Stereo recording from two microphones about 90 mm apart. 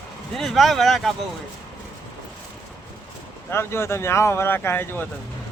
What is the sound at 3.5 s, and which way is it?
Speech, 30° left (ahead or behind).